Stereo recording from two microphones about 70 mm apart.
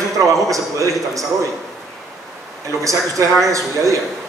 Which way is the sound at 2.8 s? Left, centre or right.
Right.